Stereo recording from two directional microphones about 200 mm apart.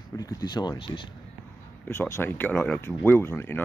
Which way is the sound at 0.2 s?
20° left (ahead or behind).